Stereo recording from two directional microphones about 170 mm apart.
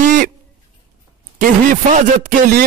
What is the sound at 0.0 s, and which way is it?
Owl, 50° right (ahead or behind).